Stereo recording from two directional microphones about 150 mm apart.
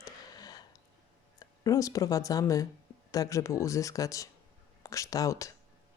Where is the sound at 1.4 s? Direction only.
20° left (ahead or behind).